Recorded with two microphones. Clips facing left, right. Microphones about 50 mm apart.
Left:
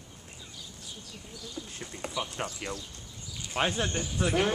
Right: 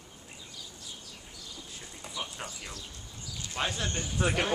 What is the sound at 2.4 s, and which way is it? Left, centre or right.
Speech, left.